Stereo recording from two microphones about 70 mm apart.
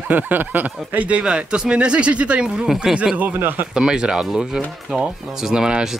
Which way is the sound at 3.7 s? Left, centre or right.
Centre.